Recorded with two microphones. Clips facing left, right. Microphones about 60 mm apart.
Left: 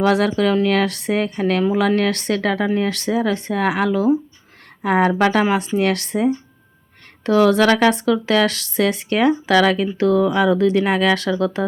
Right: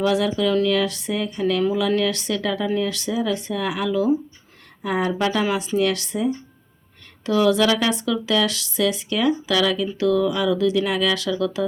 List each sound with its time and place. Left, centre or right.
0.0 s a woman's voice: left